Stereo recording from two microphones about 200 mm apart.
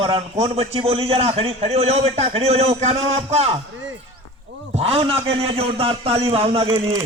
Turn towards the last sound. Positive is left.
turn(degrees=-15)  # may be behind; listen again after turning